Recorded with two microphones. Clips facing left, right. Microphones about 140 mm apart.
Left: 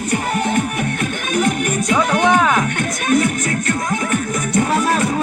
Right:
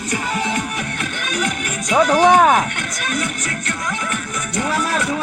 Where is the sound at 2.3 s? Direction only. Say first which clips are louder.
Right 3 dB; 45° right (ahead or behind).